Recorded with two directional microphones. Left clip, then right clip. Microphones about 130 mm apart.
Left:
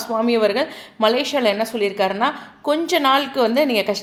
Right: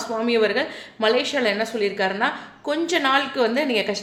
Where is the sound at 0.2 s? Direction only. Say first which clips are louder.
Left 2 dB; 30° left (ahead or behind).